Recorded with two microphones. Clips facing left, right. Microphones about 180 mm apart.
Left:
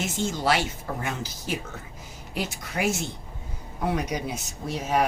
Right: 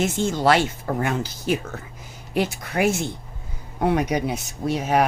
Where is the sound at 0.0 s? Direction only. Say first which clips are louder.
Right 6 dB; 55° right (ahead or behind).